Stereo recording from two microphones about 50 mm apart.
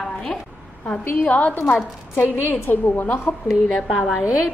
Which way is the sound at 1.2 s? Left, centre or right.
Left.